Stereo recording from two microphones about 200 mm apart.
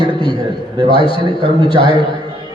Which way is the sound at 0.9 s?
25° left (ahead or behind).